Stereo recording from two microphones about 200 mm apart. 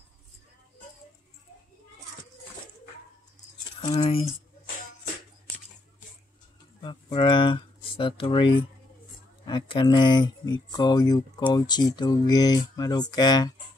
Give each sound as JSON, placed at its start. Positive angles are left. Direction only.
{"t": 3.8, "sound": "speech", "side_deg": 25}
{"t": 6.8, "sound": "speech", "side_deg": 25}
{"t": 9.5, "sound": "speech", "side_deg": 20}